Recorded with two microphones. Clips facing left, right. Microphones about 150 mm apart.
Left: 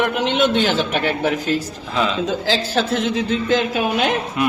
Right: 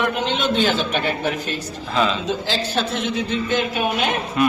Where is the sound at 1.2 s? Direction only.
90° left.